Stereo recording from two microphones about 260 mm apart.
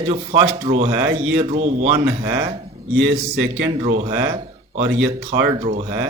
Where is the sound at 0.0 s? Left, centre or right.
Right.